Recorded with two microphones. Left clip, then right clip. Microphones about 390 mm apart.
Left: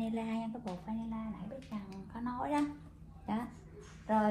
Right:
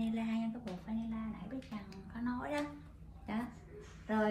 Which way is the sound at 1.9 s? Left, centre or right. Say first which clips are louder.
Even; centre.